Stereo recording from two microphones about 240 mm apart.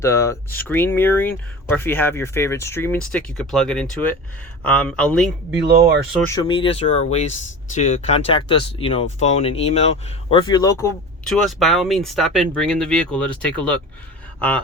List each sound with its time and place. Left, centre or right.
0.0 s speech: centre
5.5 s speech: right
6.1 s speech: centre
11.4 s speech: centre